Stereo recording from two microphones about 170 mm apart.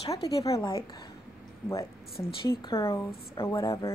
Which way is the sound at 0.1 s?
20° left (ahead or behind).